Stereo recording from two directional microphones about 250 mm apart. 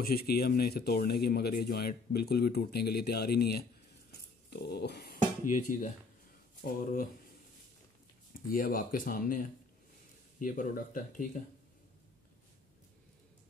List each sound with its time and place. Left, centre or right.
0.0 s speech: left
8.5 s speech: left